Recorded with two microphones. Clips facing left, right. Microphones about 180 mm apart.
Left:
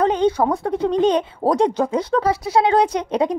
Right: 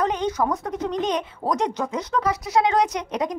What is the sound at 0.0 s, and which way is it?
Speech, 30° left (ahead or behind).